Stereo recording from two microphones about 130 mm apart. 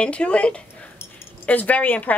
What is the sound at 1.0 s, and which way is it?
Keys jangling, 10° left (ahead or behind).